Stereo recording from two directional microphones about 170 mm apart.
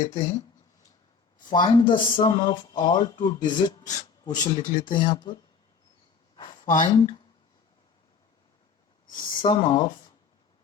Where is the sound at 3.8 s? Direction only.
45° left (ahead or behind).